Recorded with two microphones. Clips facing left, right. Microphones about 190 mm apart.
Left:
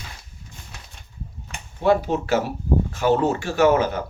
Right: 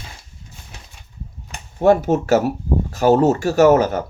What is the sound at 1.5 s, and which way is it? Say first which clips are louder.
Speech: right 5 dB; 45° right (ahead or behind).